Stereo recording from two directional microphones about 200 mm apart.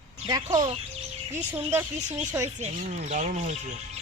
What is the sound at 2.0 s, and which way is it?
Speech, 35° right (ahead or behind).